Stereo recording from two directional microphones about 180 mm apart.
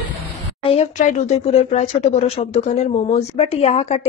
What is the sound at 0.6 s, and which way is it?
Speech, 40° left (ahead or behind).